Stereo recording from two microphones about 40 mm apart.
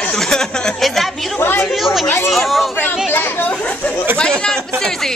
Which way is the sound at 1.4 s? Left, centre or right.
Left.